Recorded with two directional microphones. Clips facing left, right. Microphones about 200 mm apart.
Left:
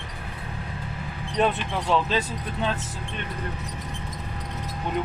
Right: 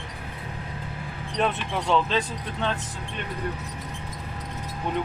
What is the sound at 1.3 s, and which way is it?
Speech, centre (ahead or behind).